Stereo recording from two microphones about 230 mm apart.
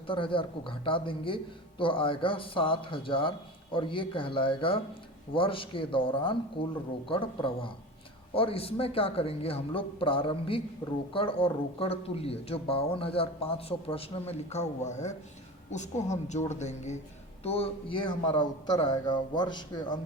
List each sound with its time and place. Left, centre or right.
0.1 s speech: left